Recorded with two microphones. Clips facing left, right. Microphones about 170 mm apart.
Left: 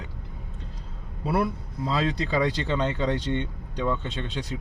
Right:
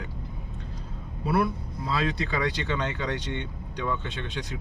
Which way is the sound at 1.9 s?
25° left (ahead or behind).